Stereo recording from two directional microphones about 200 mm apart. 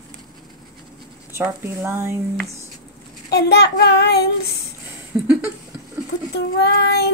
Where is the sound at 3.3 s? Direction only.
55° left (ahead or behind).